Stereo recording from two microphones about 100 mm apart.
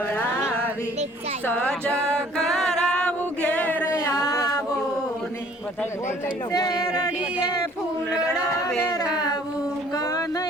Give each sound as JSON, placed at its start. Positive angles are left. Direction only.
{"t": 1.5, "sound": "a capella", "side_deg": 15}
{"t": 6.5, "sound": "speech", "side_deg": 40}
{"t": 8.1, "sound": "a man's voice", "side_deg": -10}
{"t": 9.9, "sound": "a sound", "side_deg": 35}